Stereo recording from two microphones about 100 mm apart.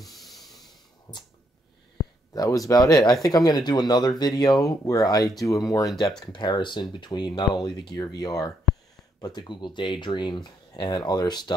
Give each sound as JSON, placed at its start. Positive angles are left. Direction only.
{"t": 0.0, "sound": "a sound", "side_deg": 0}
{"t": 2.3, "sound": "speech", "side_deg": 35}
{"t": 6.3, "sound": "speech", "side_deg": 50}